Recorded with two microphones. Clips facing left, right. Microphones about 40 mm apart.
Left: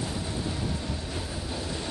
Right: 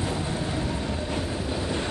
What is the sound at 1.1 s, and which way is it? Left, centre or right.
Train, right.